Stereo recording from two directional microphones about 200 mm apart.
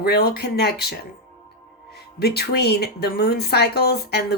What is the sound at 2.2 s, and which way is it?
A woman's voice, 50° left (ahead or behind).